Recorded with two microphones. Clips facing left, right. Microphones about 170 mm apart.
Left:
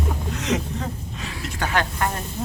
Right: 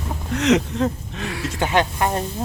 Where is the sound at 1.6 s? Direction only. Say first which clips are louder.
Right 4 dB; 20° right (ahead or behind).